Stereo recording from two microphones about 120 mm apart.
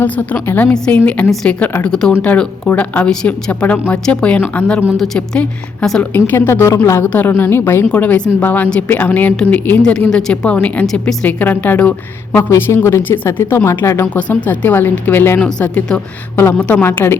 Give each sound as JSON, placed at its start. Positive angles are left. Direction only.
{"t": 0.0, "sound": "a woman's voice", "side_deg": 15}
{"t": 6.1, "sound": "a woman's voice", "side_deg": 20}
{"t": 14.2, "sound": "a woman's voice", "side_deg": 10}